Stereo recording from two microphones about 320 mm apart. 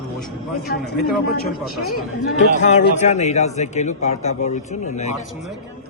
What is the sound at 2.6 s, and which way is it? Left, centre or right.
A man's voice, left.